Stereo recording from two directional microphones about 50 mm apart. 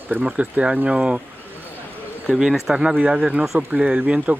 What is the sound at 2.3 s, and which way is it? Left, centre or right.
Speech, centre.